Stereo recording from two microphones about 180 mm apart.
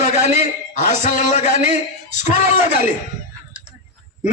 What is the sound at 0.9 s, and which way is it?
Speech, 40° left (ahead or behind).